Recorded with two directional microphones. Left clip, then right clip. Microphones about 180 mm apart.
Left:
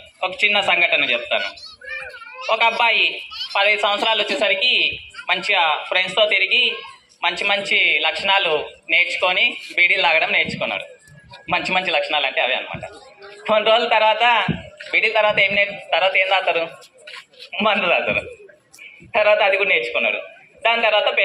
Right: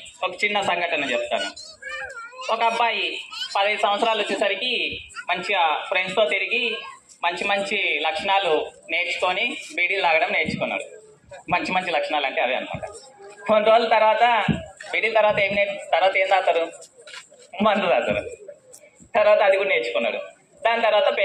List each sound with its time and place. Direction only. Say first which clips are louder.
0.2 s a man's voice: left 5 dB; 30° left (ahead or behind)
2.8 s speech: left 6 dB; 30° left (ahead or behind)
3.3 s a sound: left 2 dB; 75° right (ahead or behind)
3.5 s a man's voice: left 4 dB; 30° left (ahead or behind)